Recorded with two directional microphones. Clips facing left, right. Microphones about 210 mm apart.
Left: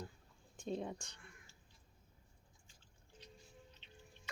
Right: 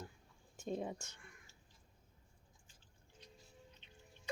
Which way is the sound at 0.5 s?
5° right (ahead or behind).